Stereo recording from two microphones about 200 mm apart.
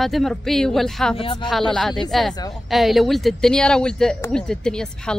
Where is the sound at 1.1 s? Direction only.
25° left (ahead or behind).